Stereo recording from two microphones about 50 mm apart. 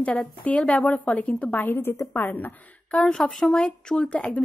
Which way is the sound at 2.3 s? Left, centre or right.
Left.